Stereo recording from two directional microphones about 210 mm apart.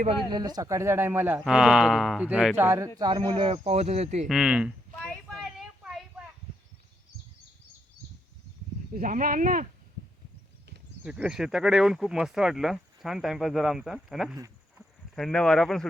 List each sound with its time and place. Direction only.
0.0 s speech: 25° right (ahead or behind); by 2.6 s 5° right (ahead or behind)
2.6 s speech: 15° right (ahead or behind); by 4.3 s 30° right (ahead or behind)
4.3 s speech: 5° right (ahead or behind)
5.3 s a sound: centre (ahead or behind)
8.9 s speech: 40° right (ahead or behind)
11.0 s speech: 5° right (ahead or behind)
14.3 s a sound: 15° right (ahead or behind)
15.1 s speech: 5° left (ahead or behind)